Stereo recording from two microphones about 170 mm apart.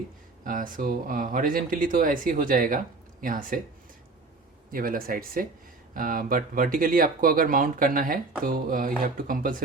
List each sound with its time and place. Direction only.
0.4 s speech: 55° right (ahead or behind)
4.7 s speech: 55° right (ahead or behind)